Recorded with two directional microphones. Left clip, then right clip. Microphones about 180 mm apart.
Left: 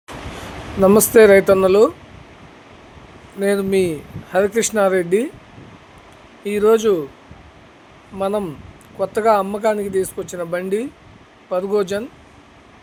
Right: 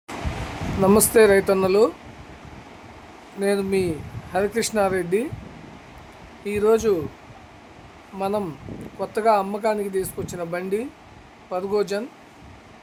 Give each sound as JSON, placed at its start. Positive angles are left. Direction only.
{"t": 0.8, "sound": "speech", "side_deg": 15}
{"t": 3.4, "sound": "speech", "side_deg": 15}
{"t": 6.4, "sound": "speech", "side_deg": 15}
{"t": 8.2, "sound": "speech", "side_deg": 10}